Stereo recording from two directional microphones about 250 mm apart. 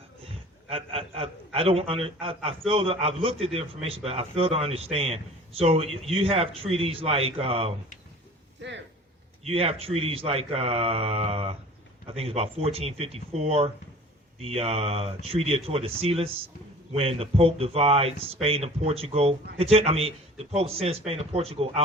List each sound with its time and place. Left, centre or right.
0.7 s a man's voice: right
9.4 s a man's voice: right